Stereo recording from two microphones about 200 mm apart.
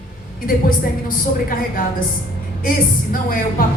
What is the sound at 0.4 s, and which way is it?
A woman's voice, 45° left (ahead or behind).